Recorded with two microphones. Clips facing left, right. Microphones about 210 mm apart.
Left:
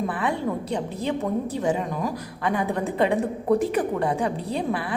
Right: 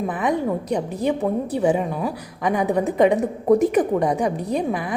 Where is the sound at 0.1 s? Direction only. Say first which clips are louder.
Right 4 dB; 15° right (ahead or behind).